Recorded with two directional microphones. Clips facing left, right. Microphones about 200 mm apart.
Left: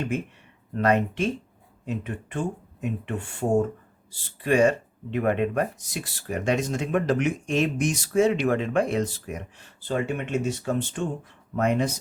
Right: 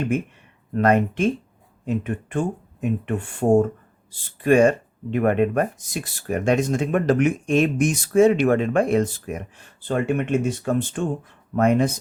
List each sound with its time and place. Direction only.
0.8 s speech: 50° right (ahead or behind)